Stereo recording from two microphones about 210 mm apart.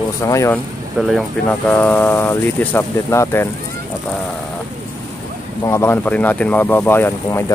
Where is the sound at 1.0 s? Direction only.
Centre (ahead or behind).